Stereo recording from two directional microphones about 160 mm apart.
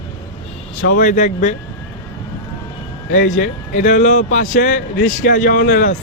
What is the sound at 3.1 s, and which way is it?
A man's voice, 55° left (ahead or behind).